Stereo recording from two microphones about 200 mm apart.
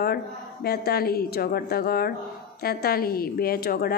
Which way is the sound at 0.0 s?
50° left (ahead or behind).